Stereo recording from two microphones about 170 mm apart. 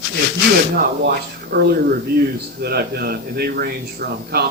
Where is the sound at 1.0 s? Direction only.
65° right (ahead or behind).